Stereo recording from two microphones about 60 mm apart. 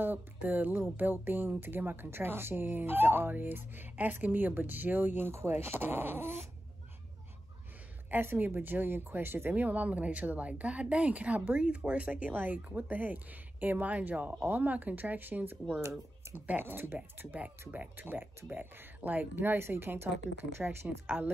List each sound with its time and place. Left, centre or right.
0.0 s speech: right
8.1 s speech: right